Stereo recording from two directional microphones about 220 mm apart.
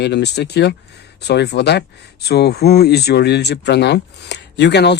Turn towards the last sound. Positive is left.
turn(degrees=50)  # may be behind; listen again after turning